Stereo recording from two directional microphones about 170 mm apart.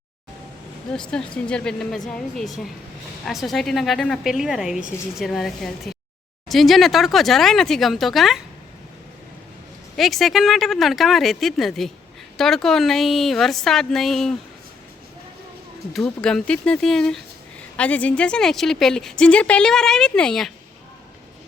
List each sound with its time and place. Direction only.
1.5 s a woman's voice: 5° left (ahead or behind)
10.0 s a woman's voice: centre (ahead or behind)
15.9 s a woman's voice: centre (ahead or behind)